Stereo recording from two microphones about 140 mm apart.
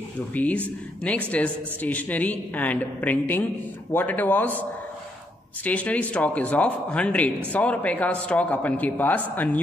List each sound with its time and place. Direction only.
0.3 s speech: 10° left (ahead or behind)